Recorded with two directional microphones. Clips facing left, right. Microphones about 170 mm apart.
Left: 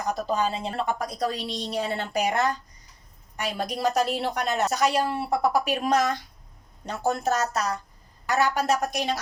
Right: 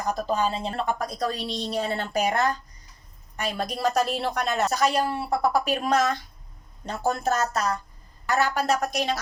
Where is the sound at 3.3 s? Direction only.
15° left (ahead or behind).